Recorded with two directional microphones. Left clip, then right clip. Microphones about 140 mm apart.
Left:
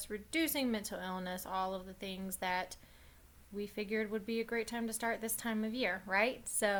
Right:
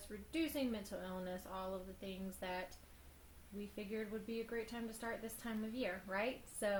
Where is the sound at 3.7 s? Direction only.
40° left (ahead or behind).